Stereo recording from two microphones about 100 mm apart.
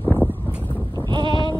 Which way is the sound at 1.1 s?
50° right (ahead or behind).